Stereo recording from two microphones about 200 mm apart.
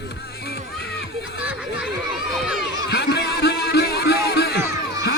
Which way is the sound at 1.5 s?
5° right (ahead or behind).